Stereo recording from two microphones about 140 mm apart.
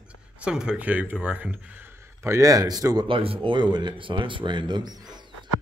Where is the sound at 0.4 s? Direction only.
5° right (ahead or behind); by 3.1 s 25° right (ahead or behind).